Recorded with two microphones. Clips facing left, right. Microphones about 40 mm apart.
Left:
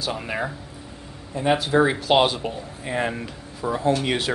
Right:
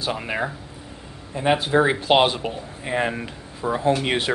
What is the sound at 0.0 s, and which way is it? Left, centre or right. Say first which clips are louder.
Speech: right 2 dB; right.